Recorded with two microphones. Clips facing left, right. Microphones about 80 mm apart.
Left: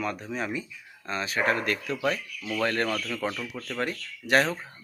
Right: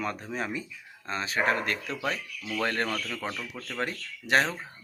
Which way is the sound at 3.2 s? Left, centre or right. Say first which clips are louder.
Left 4 dB; centre.